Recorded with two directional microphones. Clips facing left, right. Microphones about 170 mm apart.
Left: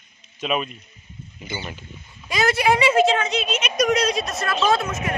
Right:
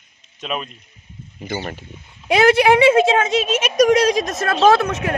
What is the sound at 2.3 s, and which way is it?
Speech, 60° right (ahead or behind).